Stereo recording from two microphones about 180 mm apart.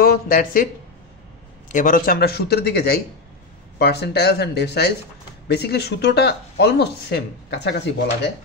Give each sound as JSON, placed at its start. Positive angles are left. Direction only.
{"t": 0.0, "sound": "speech", "side_deg": 55}
{"t": 1.7, "sound": "a man's voice", "side_deg": 50}